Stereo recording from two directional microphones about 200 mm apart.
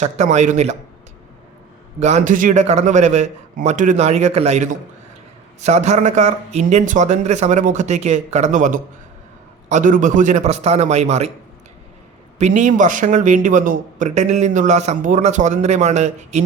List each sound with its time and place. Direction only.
0.0 s speech: 35° right (ahead or behind)
2.0 s speech: 35° right (ahead or behind)
12.4 s speech: 35° right (ahead or behind)